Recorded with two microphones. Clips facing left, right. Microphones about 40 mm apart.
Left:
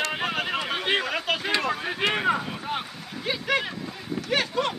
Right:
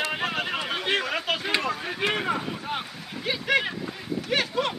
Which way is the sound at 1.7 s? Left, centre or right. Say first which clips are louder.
Left 2 dB; centre.